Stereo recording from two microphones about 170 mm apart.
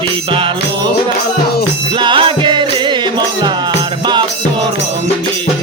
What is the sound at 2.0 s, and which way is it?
Music, 30° right (ahead or behind).